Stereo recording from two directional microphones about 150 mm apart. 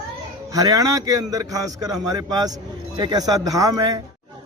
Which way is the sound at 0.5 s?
25° right (ahead or behind).